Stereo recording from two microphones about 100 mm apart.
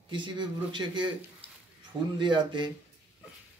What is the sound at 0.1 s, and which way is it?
Speech, 50° right (ahead or behind).